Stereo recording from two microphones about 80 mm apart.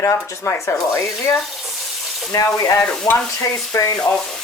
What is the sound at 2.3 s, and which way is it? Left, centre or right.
Speech, left.